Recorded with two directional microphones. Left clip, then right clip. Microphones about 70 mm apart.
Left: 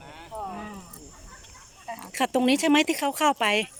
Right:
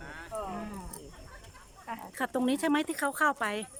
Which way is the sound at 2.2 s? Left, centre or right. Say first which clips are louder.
Left 8 dB; centre.